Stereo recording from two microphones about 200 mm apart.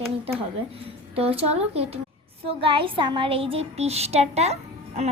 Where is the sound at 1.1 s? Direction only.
30° right (ahead or behind).